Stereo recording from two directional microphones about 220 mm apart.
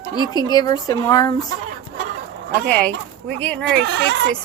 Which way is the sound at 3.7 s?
50° right (ahead or behind).